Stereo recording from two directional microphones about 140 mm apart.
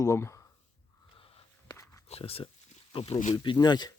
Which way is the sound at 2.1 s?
45° left (ahead or behind).